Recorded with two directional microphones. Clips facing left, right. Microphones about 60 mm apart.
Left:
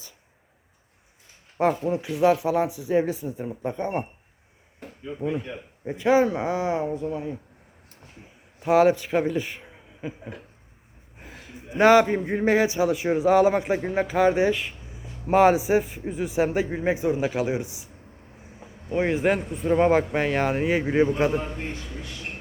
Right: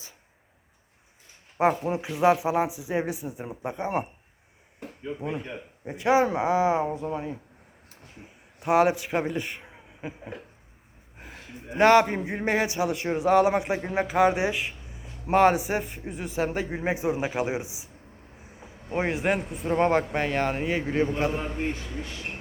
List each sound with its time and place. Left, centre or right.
1.5 s speech: centre
5.8 s speech: centre
6.2 s speech: centre
8.6 s speech: centre
11.8 s speech: centre
15.3 s speech: centre
16.7 s speech: centre
19.0 s speech: centre